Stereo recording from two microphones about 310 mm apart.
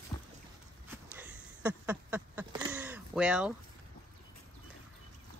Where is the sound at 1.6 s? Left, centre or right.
Centre.